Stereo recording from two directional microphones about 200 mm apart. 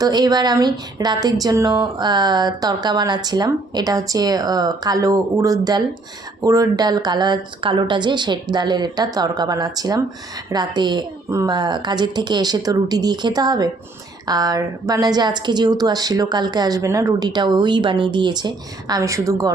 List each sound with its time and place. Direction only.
0.0 s speech: 20° right (ahead or behind)